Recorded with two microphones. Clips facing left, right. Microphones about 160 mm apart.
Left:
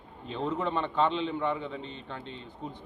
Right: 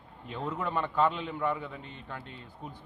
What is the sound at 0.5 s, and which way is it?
Speech, 25° left (ahead or behind).